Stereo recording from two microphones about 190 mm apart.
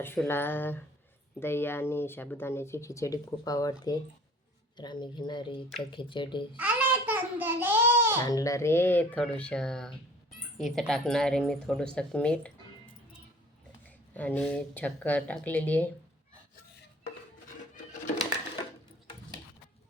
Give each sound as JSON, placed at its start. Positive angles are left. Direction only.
{"t": 0.0, "sound": "speech", "side_deg": 10}
{"t": 6.6, "sound": "babbling", "side_deg": -10}
{"t": 8.2, "sound": "speech", "side_deg": 20}
{"t": 13.8, "sound": "speech", "side_deg": 10}